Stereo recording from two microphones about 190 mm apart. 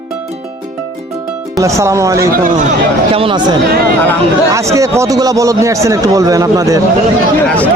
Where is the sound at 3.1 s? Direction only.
30° right (ahead or behind).